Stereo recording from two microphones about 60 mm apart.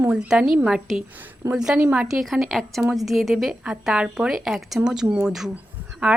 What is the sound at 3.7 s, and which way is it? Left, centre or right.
Speech, centre.